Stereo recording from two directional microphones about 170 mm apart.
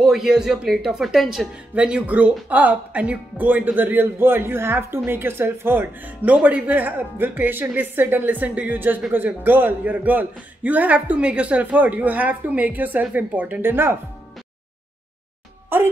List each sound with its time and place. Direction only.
0.0 s speech: centre (ahead or behind)
15.7 s music: 10° right (ahead or behind)